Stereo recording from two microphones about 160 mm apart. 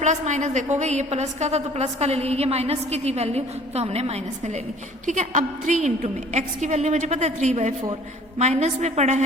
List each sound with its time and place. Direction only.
0.0 s a woman's voice: 50° right (ahead or behind)